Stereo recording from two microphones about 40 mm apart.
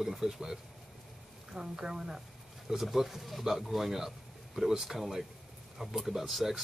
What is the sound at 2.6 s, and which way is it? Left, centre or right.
A man's voice, centre.